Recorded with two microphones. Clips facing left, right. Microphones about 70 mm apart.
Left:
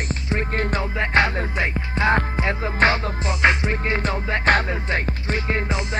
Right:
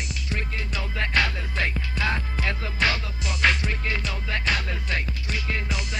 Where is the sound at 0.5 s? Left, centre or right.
Left.